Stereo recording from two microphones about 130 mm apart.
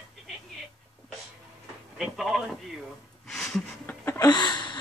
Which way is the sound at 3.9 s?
20° left (ahead or behind).